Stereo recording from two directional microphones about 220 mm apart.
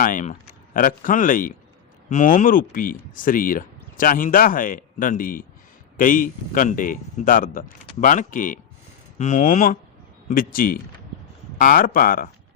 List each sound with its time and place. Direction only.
0.0 s speech: 35° left (ahead or behind)